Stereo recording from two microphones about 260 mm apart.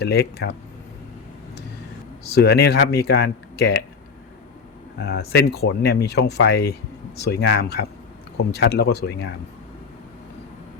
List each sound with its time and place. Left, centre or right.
0.0 s speech: left
2.3 s speech: left
4.9 s speech: left